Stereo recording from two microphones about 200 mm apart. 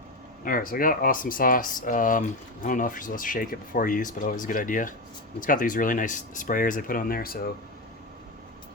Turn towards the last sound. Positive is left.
turn(degrees=50)  # may be behind; listen again after turning